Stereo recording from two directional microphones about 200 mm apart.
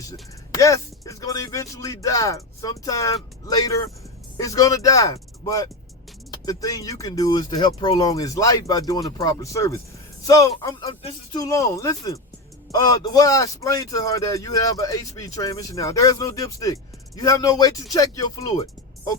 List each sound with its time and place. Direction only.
0.0 s a man's voice: 15° left (ahead or behind)